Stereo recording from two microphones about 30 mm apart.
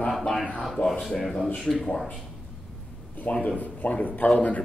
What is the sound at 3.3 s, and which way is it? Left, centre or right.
Speech, left.